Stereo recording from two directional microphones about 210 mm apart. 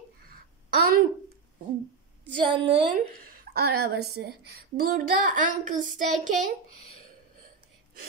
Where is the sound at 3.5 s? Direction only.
50° right (ahead or behind).